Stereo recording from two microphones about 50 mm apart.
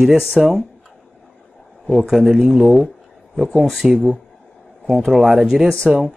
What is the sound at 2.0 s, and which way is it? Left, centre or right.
Speech, centre.